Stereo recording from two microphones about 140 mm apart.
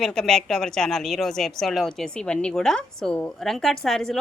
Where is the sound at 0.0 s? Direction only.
5° left (ahead or behind).